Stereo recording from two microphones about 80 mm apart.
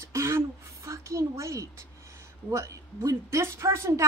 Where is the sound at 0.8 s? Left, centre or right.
Right.